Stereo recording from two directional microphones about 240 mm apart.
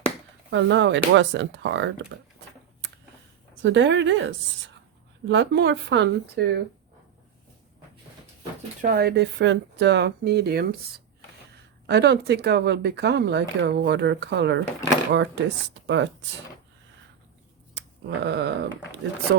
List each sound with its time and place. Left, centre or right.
0.5 s speech: right
3.6 s speech: right
8.8 s speech: right
11.9 s speech: right
17.7 s a sound: right